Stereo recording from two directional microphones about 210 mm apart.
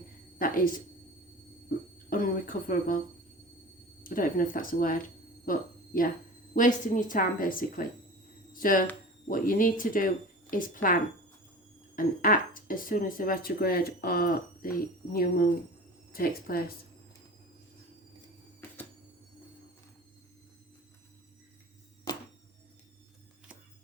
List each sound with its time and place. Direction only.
0.3 s a woman's voice: 40° left (ahead or behind)
2.0 s speech: 40° left (ahead or behind)
4.0 s speech: 40° left (ahead or behind)
11.9 s speech: 40° left (ahead or behind)